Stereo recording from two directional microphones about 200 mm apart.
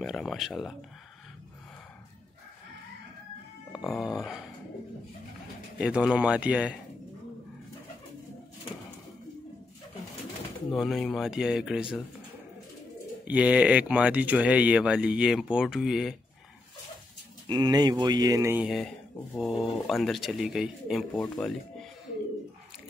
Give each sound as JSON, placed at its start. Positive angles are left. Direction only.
{"t": 0.0, "sound": "speech", "side_deg": 0}
{"t": 3.7, "sound": "speech", "side_deg": 0}
{"t": 5.8, "sound": "speech", "side_deg": -5}
{"t": 10.8, "sound": "speech", "side_deg": 0}
{"t": 13.3, "sound": "speech", "side_deg": -5}
{"t": 17.5, "sound": "speech", "side_deg": -20}
{"t": 18.7, "sound": "speech", "side_deg": 0}